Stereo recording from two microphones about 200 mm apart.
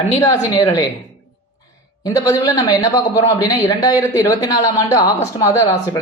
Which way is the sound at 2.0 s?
15° left (ahead or behind).